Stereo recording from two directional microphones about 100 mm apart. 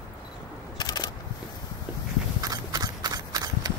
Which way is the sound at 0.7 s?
45° left (ahead or behind).